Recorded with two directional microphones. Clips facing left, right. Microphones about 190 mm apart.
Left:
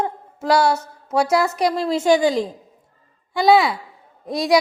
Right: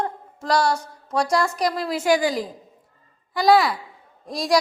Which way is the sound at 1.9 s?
25° left (ahead or behind).